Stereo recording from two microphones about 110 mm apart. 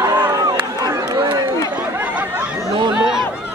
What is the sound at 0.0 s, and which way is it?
Run, 35° right (ahead or behind).